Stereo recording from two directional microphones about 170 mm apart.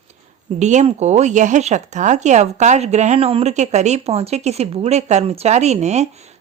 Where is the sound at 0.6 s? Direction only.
45° right (ahead or behind).